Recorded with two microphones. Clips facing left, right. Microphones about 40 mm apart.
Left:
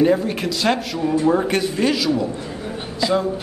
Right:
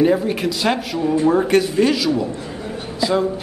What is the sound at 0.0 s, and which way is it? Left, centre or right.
A man's voice, centre.